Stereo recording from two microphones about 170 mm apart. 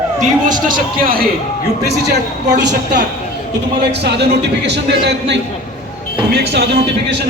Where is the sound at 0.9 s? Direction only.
60° right (ahead or behind).